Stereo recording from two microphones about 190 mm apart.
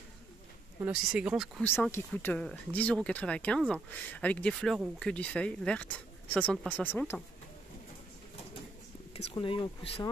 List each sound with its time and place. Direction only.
0.8 s speech: 5° right (ahead or behind)
1.6 s speech: 10° left (ahead or behind)
9.1 s speech: 30° left (ahead or behind)